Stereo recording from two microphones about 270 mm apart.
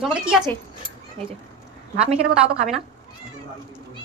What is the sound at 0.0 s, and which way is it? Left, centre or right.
Speech, centre.